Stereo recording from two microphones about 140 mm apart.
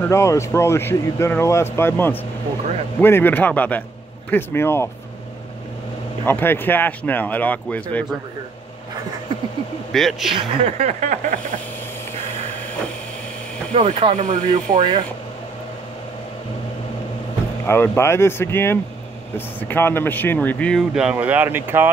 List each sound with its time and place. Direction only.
0.0 s speech: 20° left (ahead or behind)
6.2 s speech: 15° left (ahead or behind)
9.9 s speech: centre (ahead or behind)
10.3 s speech: 50° right (ahead or behind)
13.7 s speech: 40° right (ahead or behind)
14.1 s speech: 60° right (ahead or behind)
14.8 s speech: 35° right (ahead or behind)
17.6 s speech: 15° left (ahead or behind)
20.9 s speech: 5° right (ahead or behind)